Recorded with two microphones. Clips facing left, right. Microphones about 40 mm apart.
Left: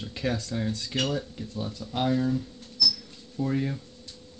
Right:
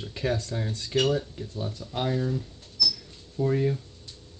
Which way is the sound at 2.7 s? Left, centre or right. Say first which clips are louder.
Left 1 dB; right.